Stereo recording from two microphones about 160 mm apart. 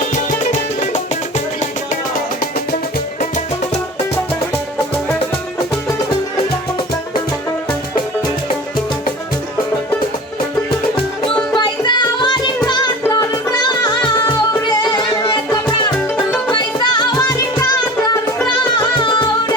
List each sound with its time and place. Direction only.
10.9 s music: 35° left (ahead or behind)